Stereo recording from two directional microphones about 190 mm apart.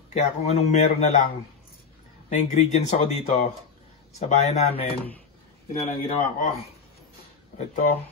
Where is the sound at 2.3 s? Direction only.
40° left (ahead or behind).